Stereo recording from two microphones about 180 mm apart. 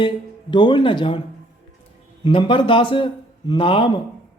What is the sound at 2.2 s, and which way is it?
Speech, 30° left (ahead or behind).